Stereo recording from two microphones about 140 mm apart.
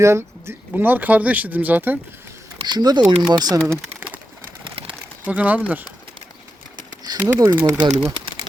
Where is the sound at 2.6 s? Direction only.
30° right (ahead or behind).